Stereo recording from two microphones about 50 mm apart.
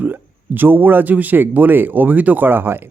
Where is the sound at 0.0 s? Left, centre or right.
Right.